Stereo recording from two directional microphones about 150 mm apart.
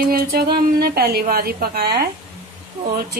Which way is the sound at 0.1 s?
85° right.